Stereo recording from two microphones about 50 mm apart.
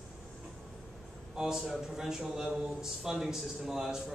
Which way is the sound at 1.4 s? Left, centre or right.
Centre.